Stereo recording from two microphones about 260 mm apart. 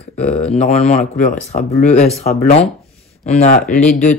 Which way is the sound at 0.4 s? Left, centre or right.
Left.